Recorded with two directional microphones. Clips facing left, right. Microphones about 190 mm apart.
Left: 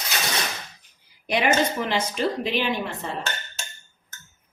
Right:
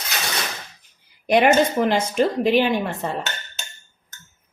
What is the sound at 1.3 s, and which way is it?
A woman's voice, 50° right (ahead or behind).